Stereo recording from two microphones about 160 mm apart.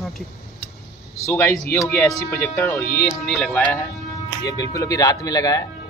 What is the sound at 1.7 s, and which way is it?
Speech, centre (ahead or behind).